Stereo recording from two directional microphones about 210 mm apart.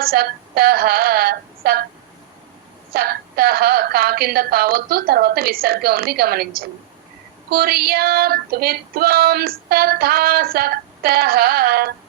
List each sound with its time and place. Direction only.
0.0 s female singing: 45° right (ahead or behind)
2.9 s female singing: 45° right (ahead or behind)